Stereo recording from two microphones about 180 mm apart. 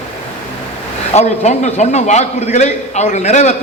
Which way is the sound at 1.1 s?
35° left (ahead or behind).